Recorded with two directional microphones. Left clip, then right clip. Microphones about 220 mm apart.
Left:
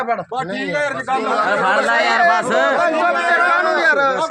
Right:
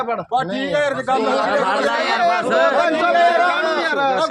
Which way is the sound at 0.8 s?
50° right (ahead or behind).